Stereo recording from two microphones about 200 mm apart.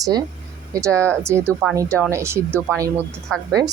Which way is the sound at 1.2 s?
15° right (ahead or behind).